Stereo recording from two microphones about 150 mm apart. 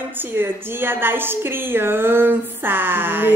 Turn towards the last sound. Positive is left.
turn(degrees=-15)  # may be behind; listen again after turning